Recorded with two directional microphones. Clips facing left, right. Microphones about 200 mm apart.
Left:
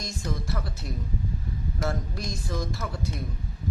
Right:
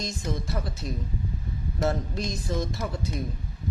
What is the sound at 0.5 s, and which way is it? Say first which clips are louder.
A man's voice: right 2 dB; 20° right (ahead or behind).